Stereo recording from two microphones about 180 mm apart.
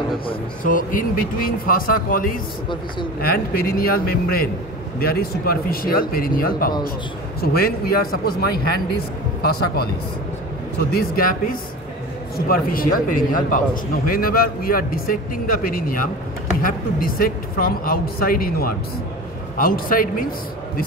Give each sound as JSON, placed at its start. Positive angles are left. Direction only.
{"t": 0.7, "sound": "speech", "side_deg": 50}
{"t": 10.9, "sound": "speech", "side_deg": 55}